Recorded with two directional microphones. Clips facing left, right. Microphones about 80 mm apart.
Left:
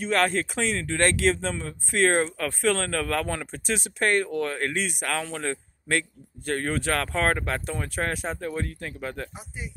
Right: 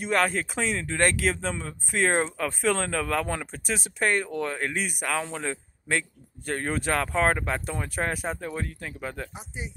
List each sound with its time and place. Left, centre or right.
0.0 s speech: centre
2.2 s speech: centre
4.3 s a man's voice: centre